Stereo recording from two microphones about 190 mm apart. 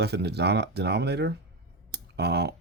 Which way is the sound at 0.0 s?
60° right (ahead or behind).